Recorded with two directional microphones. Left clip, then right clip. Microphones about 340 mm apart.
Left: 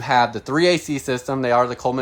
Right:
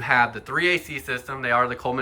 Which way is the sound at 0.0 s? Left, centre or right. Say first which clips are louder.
Left 2 dB; centre.